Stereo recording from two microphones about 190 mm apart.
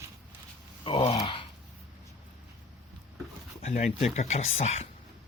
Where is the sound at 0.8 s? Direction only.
30° left (ahead or behind).